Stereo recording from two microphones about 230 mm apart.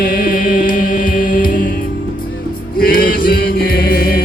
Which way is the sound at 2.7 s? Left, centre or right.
Left.